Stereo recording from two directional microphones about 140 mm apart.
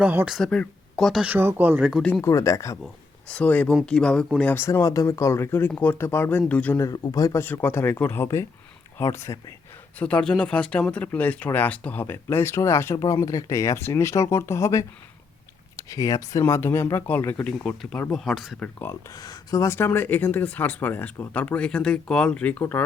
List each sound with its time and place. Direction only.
0.0 s speech: 10° right (ahead or behind)
0.3 s speech: 5° left (ahead or behind)
1.2 s speech: 15° right (ahead or behind)
1.9 s speech: centre (ahead or behind)
2.2 s speech: 20° left (ahead or behind)
2.8 s speech: 5° left (ahead or behind)
4.5 s speech: 20° left (ahead or behind)
6.7 s speech: 25° left (ahead or behind)
10.0 s speech: 10° left (ahead or behind)
18.6 s speech: 15° left (ahead or behind)
19.2 s speech: 30° left (ahead or behind); by 22.8 s 10° left (ahead or behind)